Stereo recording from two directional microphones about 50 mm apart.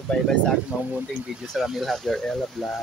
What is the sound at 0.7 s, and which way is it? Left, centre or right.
Speech, right.